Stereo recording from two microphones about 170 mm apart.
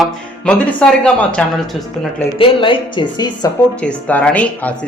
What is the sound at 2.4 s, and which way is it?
Speech, 30° left (ahead or behind).